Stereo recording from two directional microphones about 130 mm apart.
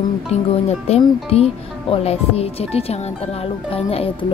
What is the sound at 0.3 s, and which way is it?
Speech, 55° left (ahead or behind).